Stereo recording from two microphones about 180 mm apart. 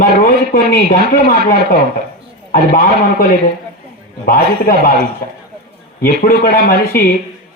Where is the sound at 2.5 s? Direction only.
50° left (ahead or behind).